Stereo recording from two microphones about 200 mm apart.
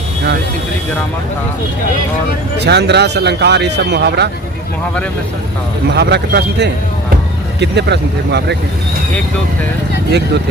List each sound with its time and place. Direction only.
2.6 s speech: 55° right (ahead or behind)
6.0 s speech: 55° right (ahead or behind)